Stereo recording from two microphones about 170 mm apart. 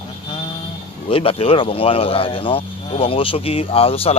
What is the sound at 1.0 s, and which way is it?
Speech, 35° left (ahead or behind).